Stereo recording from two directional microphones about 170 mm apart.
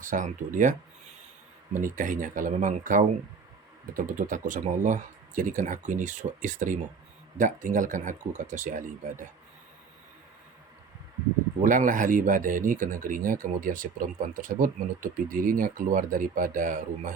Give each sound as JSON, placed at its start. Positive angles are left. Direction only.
{"t": 0.0, "sound": "speech", "side_deg": -50}
{"t": 11.6, "sound": "speech", "side_deg": -50}